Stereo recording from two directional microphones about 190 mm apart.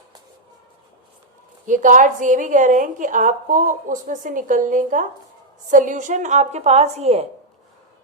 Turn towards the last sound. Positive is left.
turn(degrees=-35)  # may be behind; listen again after turning